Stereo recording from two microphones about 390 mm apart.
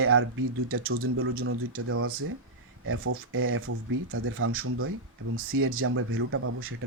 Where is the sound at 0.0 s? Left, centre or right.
Right.